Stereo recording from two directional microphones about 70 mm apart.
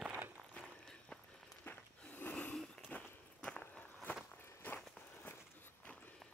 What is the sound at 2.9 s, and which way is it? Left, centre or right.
Walk, centre.